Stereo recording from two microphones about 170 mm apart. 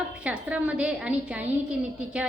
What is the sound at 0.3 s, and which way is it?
A woman's voice, 5° right (ahead or behind).